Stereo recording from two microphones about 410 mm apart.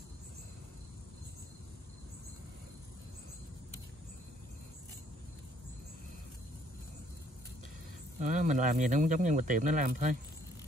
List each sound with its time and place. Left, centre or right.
8.2 s speech: centre